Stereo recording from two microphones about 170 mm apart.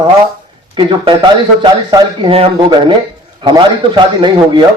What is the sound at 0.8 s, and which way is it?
A man's voice, 30° right (ahead or behind).